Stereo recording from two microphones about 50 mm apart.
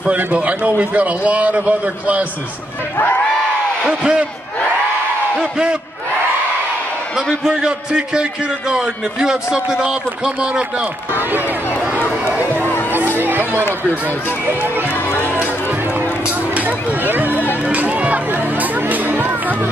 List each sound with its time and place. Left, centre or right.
0.1 s a man's voice: right
4.0 s a man's voice: centre
5.3 s a man's voice: centre
7.4 s a man's voice: centre
11.1 s speech: right
12.4 s a sound: right
13.2 s chatter: right
14.0 s speech: right
14.9 s music: left
15.3 s run: right
16.6 s speech: right
17.6 s music: right